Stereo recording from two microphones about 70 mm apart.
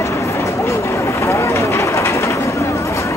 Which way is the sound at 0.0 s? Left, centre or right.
Left.